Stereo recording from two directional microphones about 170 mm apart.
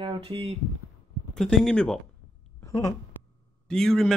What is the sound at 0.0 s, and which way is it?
Speech, 30° right (ahead or behind).